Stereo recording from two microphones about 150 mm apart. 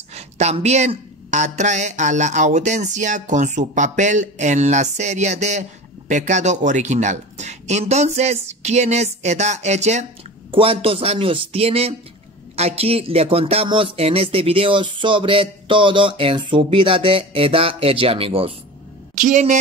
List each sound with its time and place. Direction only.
0.1 s a woman's voice: 50° right (ahead or behind)
10.5 s speech: 40° right (ahead or behind)
19.1 s a woman's voice: 55° right (ahead or behind)